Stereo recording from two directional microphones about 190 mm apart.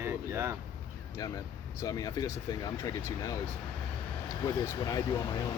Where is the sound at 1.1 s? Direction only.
20° left (ahead or behind).